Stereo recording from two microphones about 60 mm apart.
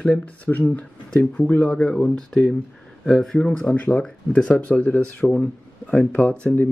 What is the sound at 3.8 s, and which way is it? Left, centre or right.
Speech, left.